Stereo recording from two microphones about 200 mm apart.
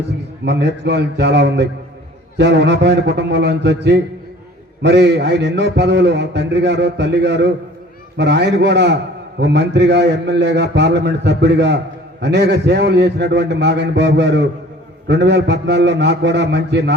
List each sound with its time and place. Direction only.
0.4 s a man's voice: 60° right (ahead or behind)